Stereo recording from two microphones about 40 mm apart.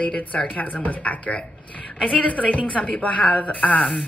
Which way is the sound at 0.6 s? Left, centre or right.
Left.